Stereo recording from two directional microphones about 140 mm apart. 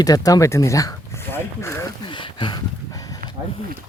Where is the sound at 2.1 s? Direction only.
35° left (ahead or behind).